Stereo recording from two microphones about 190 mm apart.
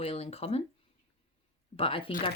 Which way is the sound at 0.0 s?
30° left (ahead or behind).